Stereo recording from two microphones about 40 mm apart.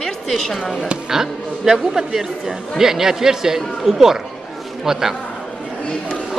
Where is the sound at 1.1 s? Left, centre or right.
Centre.